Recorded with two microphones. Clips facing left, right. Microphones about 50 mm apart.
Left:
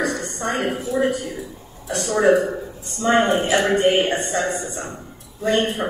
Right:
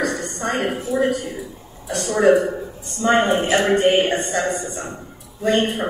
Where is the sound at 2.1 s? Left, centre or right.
Right.